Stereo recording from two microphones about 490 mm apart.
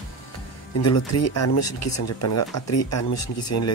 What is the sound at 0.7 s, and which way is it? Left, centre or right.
Speech, left.